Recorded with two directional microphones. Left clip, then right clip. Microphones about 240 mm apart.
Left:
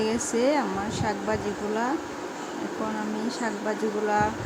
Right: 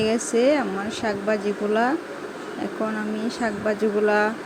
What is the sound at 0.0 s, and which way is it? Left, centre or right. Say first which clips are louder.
Speech: right 4 dB; centre.